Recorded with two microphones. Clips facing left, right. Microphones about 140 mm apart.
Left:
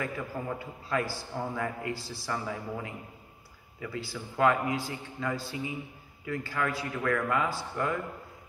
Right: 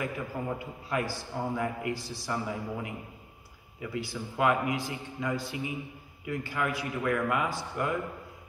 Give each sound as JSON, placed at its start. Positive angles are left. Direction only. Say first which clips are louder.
{"t": 0.6, "sound": "a man's voice", "louder": "even", "side_deg": -20}